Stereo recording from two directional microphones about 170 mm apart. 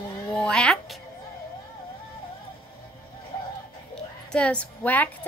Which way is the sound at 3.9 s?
5° left (ahead or behind).